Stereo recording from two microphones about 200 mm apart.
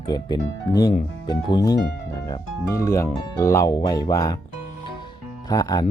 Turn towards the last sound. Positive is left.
turn(degrees=20)  # may be behind; listen again after turning